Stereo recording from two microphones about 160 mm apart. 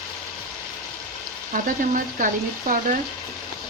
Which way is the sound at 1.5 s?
55° right (ahead or behind).